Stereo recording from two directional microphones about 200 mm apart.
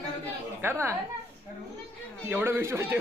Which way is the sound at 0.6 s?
10° right (ahead or behind).